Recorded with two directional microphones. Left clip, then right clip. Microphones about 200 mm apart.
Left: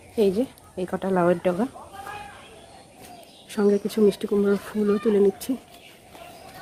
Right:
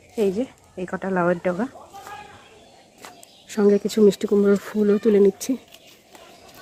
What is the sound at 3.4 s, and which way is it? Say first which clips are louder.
Speech: right 3 dB; 25° right (ahead or behind).